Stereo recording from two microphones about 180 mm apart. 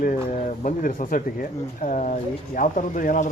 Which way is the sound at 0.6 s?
45° left (ahead or behind).